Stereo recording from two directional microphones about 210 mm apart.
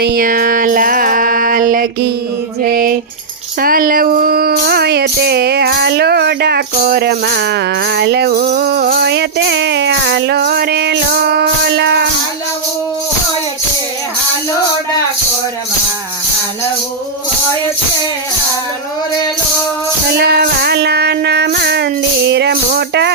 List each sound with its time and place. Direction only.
0.0 s music: 45° right (ahead or behind)
2.6 s a sound: 45° right (ahead or behind)
3.6 s music: 45° right (ahead or behind)
20.1 s child singing: 50° right (ahead or behind)